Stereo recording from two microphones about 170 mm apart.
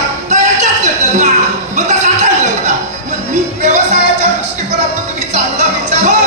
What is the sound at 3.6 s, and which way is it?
Music, 45° right (ahead or behind).